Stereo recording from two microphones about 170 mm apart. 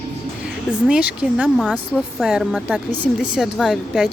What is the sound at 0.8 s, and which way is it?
Speech, 5° right (ahead or behind).